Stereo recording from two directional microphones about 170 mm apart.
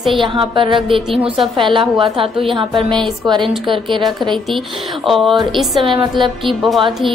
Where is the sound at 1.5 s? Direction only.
30° right (ahead or behind).